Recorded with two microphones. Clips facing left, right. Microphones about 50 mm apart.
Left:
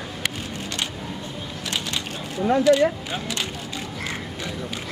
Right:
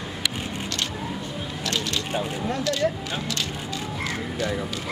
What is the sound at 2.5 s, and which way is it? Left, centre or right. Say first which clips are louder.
Speech: left 9 dB; left.